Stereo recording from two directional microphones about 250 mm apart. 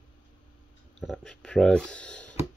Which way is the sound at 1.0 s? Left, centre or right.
Centre.